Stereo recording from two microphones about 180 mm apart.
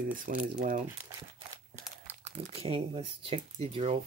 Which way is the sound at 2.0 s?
35° right (ahead or behind).